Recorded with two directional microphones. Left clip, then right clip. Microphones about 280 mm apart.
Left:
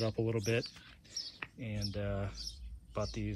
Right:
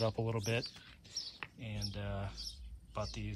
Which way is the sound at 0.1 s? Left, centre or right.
Centre.